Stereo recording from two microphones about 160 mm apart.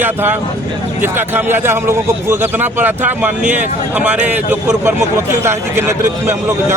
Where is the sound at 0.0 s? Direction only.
10° right (ahead or behind).